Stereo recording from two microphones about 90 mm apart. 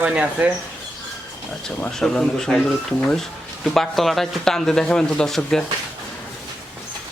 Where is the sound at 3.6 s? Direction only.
5° left (ahead or behind).